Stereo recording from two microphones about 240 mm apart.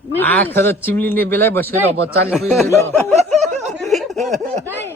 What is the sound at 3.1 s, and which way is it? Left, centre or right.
Snicker, right.